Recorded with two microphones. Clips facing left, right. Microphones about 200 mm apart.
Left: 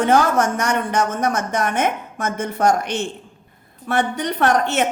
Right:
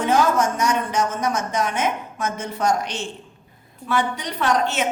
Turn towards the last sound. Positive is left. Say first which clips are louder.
# left 3 dB
turn(degrees=60)  # may be behind; listen again after turning